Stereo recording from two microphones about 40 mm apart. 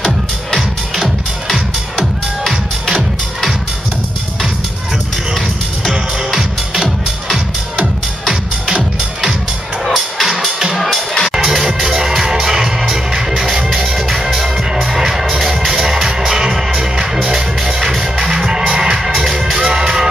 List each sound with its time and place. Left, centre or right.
0.6 s music: centre
5.9 s music: centre
9.8 s music: centre
10.8 s music: centre
11.3 s music: centre
16.3 s music: right
17.2 s music: centre